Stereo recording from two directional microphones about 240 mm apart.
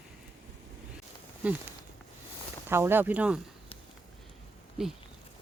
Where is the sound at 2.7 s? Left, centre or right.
Centre.